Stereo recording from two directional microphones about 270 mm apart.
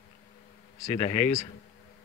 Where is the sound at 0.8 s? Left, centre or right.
Left.